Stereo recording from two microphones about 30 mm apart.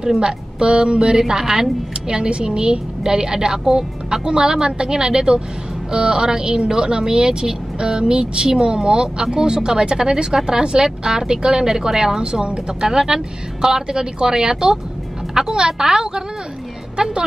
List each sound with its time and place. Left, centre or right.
0.0 s speech: right
2.0 s speech: right
16.9 s speech: right